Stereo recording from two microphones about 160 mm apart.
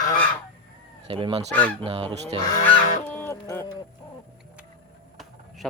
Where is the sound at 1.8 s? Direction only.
35° right (ahead or behind).